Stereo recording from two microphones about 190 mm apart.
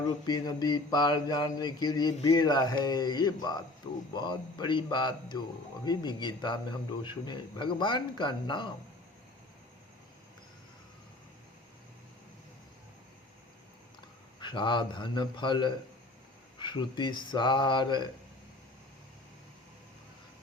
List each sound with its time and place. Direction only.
0.3 s mantra: 20° left (ahead or behind)
14.4 s mantra: 25° left (ahead or behind)